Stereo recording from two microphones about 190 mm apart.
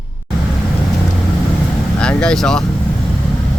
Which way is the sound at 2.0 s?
5° left (ahead or behind).